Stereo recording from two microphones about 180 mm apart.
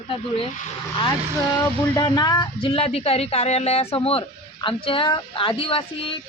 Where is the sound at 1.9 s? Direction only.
25° left (ahead or behind).